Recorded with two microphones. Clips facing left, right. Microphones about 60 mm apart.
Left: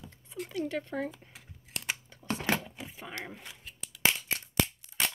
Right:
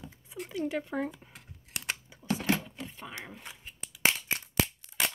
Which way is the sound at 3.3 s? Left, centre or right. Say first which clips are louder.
Even; centre.